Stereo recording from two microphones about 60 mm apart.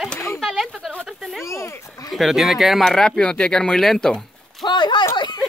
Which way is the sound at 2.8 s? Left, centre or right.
Centre.